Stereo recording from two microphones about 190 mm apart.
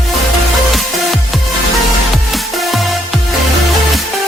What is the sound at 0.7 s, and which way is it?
Music, centre (ahead or behind).